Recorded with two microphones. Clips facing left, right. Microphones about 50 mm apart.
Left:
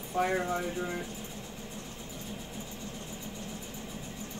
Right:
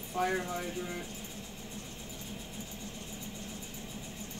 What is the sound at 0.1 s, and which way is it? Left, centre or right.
Speech, left.